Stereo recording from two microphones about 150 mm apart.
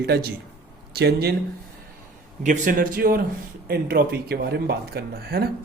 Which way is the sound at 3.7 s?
90° right.